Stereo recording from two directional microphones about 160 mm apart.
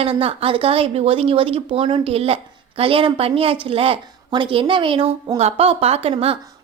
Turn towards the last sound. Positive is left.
turn(degrees=-35)  # may be behind; listen again after turning